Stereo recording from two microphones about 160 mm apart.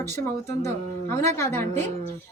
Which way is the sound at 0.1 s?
15° left (ahead or behind).